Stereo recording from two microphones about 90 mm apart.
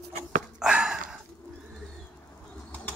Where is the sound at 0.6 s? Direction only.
10° right (ahead or behind).